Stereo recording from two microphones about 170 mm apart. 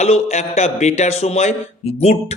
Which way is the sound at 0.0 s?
40° left (ahead or behind).